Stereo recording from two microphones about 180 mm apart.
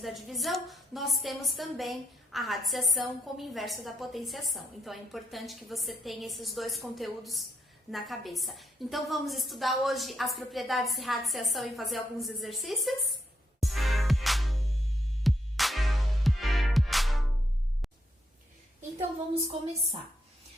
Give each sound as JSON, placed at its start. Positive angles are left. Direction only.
{"t": 0.0, "sound": "a woman's voice", "side_deg": 0}
{"t": 13.6, "sound": "music", "side_deg": 0}
{"t": 18.8, "sound": "a sound", "side_deg": -35}